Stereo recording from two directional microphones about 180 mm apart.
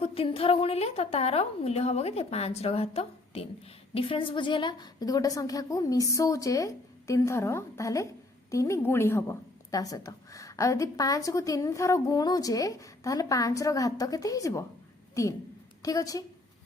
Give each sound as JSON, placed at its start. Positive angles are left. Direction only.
{"t": 0.0, "sound": "a woman's voice", "side_deg": 30}